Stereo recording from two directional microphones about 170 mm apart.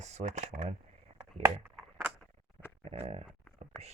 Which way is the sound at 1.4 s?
10° right (ahead or behind).